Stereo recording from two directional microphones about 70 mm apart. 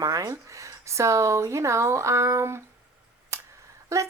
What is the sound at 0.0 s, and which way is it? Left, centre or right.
A woman's voice, right.